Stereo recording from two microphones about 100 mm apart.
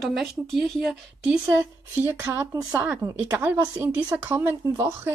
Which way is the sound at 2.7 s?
15° right (ahead or behind).